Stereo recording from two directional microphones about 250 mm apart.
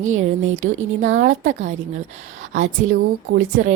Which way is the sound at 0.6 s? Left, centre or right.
Right.